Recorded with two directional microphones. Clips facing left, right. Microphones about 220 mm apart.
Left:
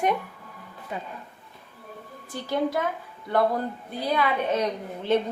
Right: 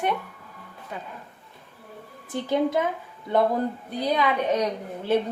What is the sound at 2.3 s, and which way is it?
Speech, 20° right (ahead or behind).